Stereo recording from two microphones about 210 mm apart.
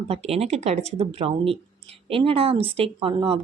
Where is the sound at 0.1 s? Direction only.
30° right (ahead or behind).